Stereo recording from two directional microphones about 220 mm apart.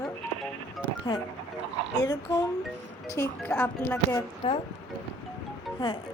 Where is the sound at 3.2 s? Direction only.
5° left (ahead or behind).